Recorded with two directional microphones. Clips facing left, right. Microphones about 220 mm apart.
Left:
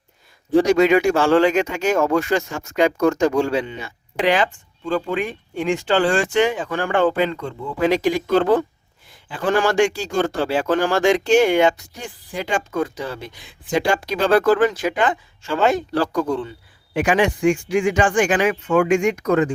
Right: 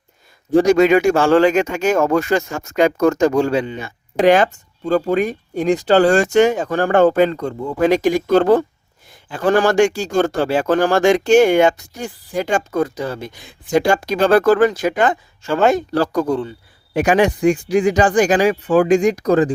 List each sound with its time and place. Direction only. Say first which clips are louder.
0.5 s speech: right 3 dB; 45° right (ahead or behind)